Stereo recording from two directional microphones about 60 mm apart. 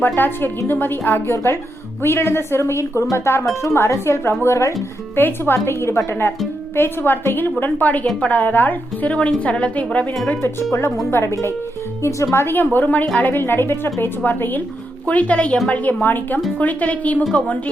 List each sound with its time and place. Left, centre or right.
0.0 s a woman's voice: left
5.1 s a woman's voice: left
6.7 s a woman's voice: left; by 10.1 s centre
10.4 s speech: left
12.5 s a woman's voice: left